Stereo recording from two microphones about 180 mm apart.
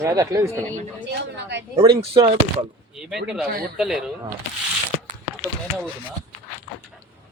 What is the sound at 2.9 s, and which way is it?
Speech, 5° right (ahead or behind).